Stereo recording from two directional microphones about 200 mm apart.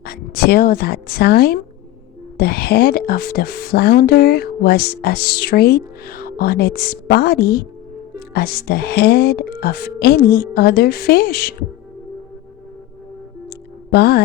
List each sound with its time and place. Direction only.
0.0 s speech: 50° left (ahead or behind)
13.9 s speech: 50° left (ahead or behind)